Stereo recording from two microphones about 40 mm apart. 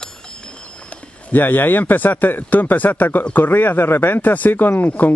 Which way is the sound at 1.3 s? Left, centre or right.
Left.